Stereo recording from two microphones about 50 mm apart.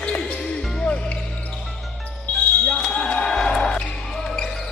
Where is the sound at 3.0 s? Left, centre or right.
Centre.